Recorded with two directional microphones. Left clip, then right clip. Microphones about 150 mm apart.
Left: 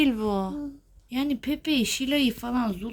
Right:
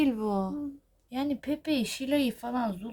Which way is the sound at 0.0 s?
Centre (ahead or behind).